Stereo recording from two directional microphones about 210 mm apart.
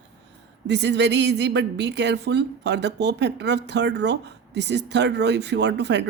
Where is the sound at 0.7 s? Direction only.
55° right (ahead or behind).